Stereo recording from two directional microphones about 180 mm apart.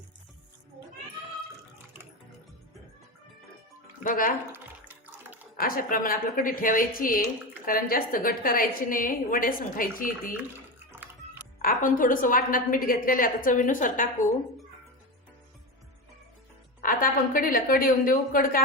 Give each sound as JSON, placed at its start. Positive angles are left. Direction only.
{"t": 4.0, "sound": "a woman's voice", "side_deg": 50}
{"t": 4.5, "sound": "water", "side_deg": -10}
{"t": 5.5, "sound": "a woman's voice", "side_deg": 50}
{"t": 10.3, "sound": "music", "side_deg": -10}
{"t": 11.6, "sound": "a woman's voice", "side_deg": 50}
{"t": 16.8, "sound": "a woman's voice", "side_deg": 50}